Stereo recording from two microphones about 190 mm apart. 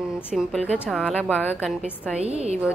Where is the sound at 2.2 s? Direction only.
35° right (ahead or behind).